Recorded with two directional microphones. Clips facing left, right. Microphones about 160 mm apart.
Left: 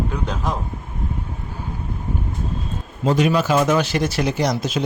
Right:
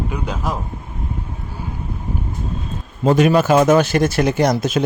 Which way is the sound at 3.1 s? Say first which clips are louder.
Right 4 dB; 50° right (ahead or behind).